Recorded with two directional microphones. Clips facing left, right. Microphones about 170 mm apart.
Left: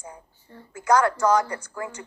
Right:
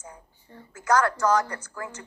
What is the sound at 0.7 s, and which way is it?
Speech, 15° left (ahead or behind).